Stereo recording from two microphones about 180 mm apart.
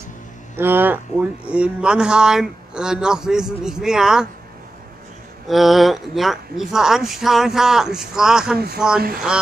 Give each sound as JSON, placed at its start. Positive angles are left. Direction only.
{"t": 0.6, "sound": "speech", "side_deg": -10}
{"t": 5.5, "sound": "speech", "side_deg": 0}